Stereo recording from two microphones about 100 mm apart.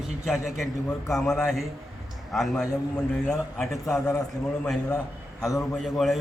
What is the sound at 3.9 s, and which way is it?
Speech, 30° left (ahead or behind).